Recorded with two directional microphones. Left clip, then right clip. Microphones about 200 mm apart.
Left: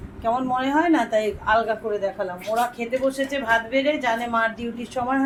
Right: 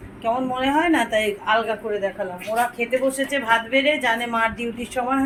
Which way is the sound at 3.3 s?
15° right (ahead or behind).